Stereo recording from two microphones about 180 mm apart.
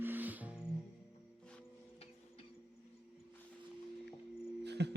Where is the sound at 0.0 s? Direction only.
10° right (ahead or behind).